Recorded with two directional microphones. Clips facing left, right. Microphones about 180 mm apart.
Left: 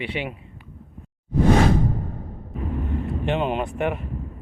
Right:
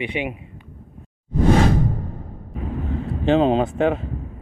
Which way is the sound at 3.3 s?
90° right.